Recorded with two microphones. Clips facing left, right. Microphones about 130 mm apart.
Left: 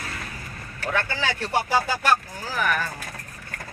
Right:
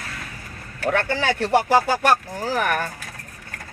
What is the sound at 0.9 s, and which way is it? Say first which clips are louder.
Speech: right 5 dB; 60° right (ahead or behind).